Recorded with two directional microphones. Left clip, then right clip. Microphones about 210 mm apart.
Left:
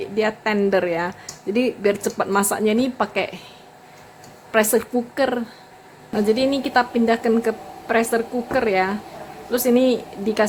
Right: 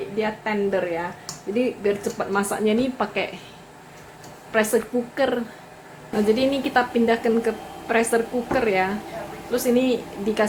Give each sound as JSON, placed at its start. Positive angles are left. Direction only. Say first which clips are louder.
{"t": 0.2, "sound": "a woman's voice", "louder": "left 4 dB", "side_deg": 45}
{"t": 4.5, "sound": "a woman's voice", "louder": "left 3 dB", "side_deg": 35}